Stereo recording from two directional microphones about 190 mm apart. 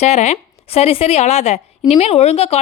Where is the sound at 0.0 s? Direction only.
35° left (ahead or behind).